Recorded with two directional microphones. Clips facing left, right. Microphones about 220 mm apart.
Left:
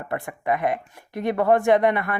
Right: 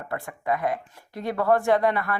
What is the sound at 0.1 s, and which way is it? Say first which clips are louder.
Speech: left 2 dB; 20° left (ahead or behind).